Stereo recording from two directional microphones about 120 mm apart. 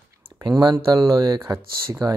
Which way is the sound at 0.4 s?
35° right (ahead or behind).